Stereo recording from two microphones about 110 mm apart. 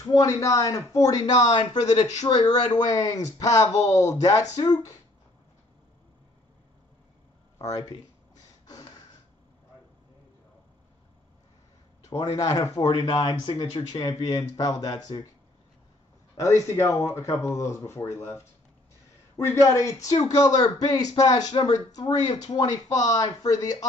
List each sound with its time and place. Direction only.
0.0 s speech: 30° left (ahead or behind)
1.2 s speech: 40° left (ahead or behind)
7.5 s speech: 35° left (ahead or behind)
8.6 s a sound: 35° left (ahead or behind)
12.0 s speech: 35° left (ahead or behind)
12.8 s speech: 45° left (ahead or behind)
16.3 s speech: 30° left (ahead or behind)